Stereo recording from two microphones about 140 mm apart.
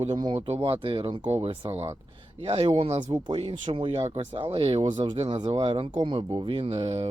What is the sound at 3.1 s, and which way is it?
Speech, 35° right (ahead or behind).